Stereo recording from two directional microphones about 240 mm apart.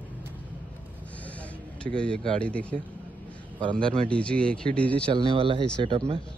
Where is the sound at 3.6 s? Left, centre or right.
Right.